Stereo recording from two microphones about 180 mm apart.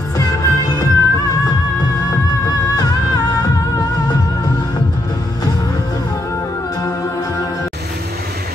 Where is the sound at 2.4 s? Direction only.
20° left (ahead or behind).